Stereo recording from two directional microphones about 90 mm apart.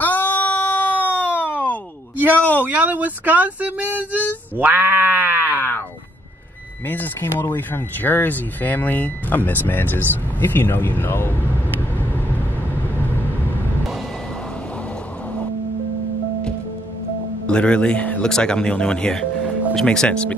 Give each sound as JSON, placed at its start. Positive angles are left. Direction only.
{"t": 0.0, "sound": "a sound", "side_deg": 20}
{"t": 2.3, "sound": "speech", "side_deg": 15}
{"t": 2.6, "sound": "speech", "side_deg": -20}
{"t": 4.6, "sound": "sheep", "side_deg": -20}
{"t": 5.5, "sound": "speech", "side_deg": 20}
{"t": 6.9, "sound": "speech", "side_deg": 25}
{"t": 12.9, "sound": "vehicle", "side_deg": 25}
{"t": 17.5, "sound": "speech", "side_deg": 10}